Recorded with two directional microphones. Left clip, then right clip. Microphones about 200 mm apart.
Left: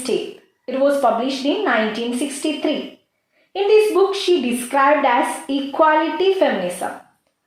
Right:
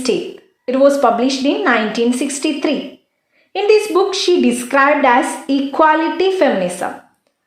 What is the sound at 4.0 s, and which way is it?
A woman's voice, 45° right (ahead or behind).